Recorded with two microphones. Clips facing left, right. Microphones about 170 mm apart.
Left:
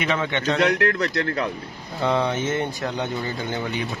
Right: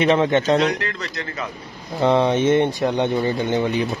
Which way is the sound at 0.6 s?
65° left (ahead or behind).